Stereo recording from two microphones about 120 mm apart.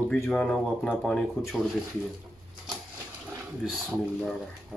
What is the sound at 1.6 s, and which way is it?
Speech, 5° right (ahead or behind).